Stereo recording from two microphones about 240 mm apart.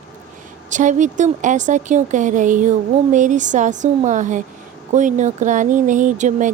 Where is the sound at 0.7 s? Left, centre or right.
Right.